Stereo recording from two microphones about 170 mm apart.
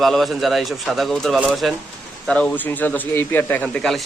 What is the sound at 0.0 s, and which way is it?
Speech, centre (ahead or behind).